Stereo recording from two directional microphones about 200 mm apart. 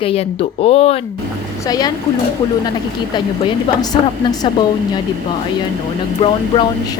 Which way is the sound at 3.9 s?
25° left (ahead or behind).